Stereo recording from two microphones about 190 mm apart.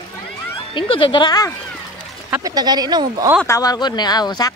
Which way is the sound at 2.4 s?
20° right (ahead or behind).